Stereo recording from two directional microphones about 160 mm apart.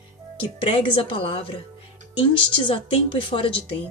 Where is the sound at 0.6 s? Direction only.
35° left (ahead or behind).